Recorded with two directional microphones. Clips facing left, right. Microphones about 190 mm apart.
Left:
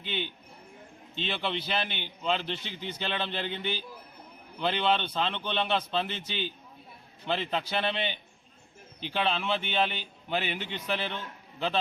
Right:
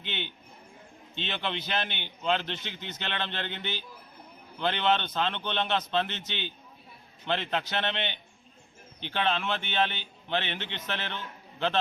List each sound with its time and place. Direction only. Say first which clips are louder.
0.0 s a man's voice: left 3 dB; 5° left (ahead or behind)